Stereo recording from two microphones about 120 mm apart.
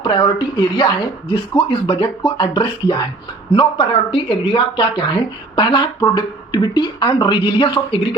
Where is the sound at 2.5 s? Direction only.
35° left (ahead or behind).